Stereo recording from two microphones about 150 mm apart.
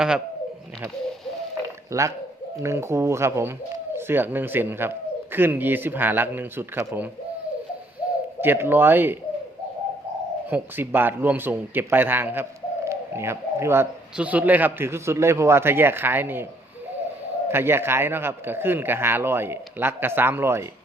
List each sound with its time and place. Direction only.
1.9 s speech: 20° right (ahead or behind)
8.4 s speech: 15° right (ahead or behind)
10.5 s speech: 15° right (ahead or behind)
17.5 s speech: 15° right (ahead or behind)